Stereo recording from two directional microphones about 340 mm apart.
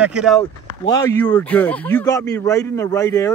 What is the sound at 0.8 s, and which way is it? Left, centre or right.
Speech, centre.